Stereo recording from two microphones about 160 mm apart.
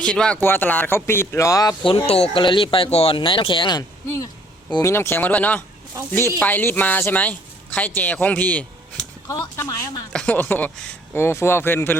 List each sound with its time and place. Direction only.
0.0 s a man's voice: 5° left (ahead or behind)
1.8 s a man's voice: 30° left (ahead or behind)
10.1 s a man's voice: 5° left (ahead or behind)